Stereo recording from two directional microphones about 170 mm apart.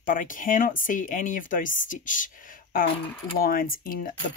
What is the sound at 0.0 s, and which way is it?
Speech, 50° left (ahead or behind).